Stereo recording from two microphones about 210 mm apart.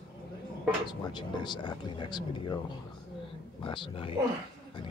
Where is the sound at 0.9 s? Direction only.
20° left (ahead or behind).